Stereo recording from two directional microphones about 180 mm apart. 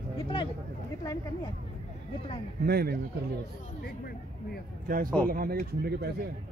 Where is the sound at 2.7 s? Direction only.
60° right (ahead or behind).